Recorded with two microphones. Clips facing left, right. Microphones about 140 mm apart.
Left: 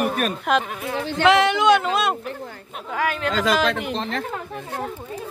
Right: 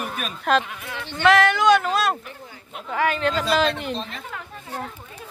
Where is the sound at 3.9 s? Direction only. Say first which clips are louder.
Left 4 dB; 75° left (ahead or behind).